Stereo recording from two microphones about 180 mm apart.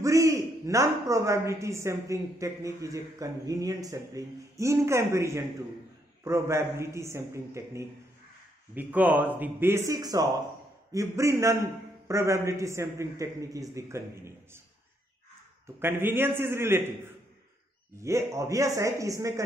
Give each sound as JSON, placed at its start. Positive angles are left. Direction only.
{"t": 0.0, "sound": "a man's voice", "side_deg": -15}
{"t": 15.6, "sound": "a man's voice", "side_deg": -10}